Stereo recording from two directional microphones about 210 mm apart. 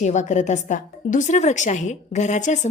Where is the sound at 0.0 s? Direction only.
35° left (ahead or behind).